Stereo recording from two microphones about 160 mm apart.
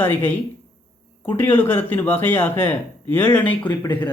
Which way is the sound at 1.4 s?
15° left (ahead or behind).